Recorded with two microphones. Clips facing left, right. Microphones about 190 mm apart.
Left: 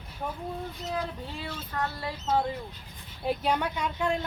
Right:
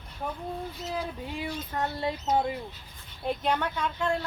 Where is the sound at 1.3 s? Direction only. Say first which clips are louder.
Right 3 dB; 15° right (ahead or behind).